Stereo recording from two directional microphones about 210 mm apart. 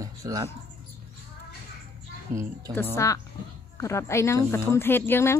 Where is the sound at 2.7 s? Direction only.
10° left (ahead or behind).